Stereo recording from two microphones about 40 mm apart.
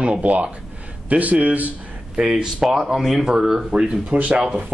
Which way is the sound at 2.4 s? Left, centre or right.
Centre.